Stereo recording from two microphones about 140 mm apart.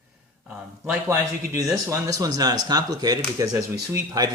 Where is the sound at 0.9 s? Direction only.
10° right (ahead or behind).